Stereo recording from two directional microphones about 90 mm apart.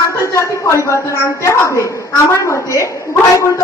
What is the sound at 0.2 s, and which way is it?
A woman's voice, 35° left (ahead or behind).